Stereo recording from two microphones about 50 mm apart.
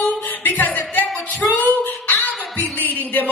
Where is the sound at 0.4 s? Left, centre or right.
Left.